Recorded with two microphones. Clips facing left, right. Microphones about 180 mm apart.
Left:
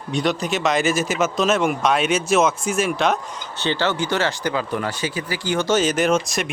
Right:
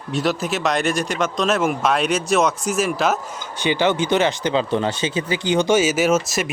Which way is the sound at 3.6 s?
15° right (ahead or behind).